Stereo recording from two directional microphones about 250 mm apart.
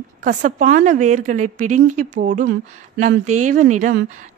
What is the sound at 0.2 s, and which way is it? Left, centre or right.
A woman's voice, right.